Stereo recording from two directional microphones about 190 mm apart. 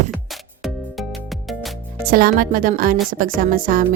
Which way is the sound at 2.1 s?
50° right (ahead or behind).